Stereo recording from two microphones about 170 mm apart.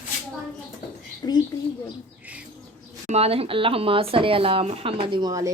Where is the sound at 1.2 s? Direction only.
20° left (ahead or behind).